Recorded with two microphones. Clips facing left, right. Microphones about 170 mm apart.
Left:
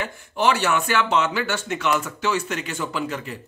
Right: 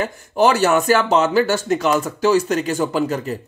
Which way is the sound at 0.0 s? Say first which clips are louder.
Right 6 dB; 40° right (ahead or behind).